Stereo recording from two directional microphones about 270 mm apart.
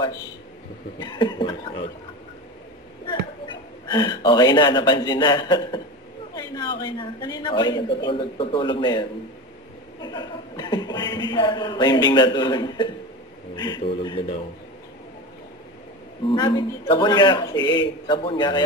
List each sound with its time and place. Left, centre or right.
0.9 s speech: centre
3.8 s speech: centre
16.3 s speech: centre